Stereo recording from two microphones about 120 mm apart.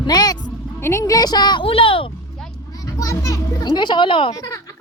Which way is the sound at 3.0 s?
30° left (ahead or behind).